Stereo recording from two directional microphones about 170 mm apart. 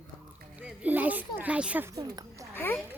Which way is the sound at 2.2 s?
20° right (ahead or behind).